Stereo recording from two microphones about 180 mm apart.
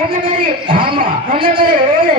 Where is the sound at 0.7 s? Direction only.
30° right (ahead or behind).